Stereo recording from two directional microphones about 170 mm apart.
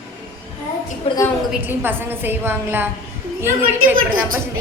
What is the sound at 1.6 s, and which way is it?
A woman's voice, 10° right (ahead or behind).